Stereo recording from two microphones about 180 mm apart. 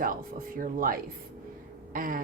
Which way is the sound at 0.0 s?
50° right (ahead or behind).